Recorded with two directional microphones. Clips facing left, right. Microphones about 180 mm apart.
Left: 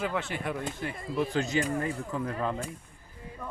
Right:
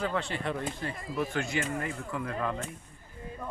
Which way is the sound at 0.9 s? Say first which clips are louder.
Left 5 dB; 25° left (ahead or behind).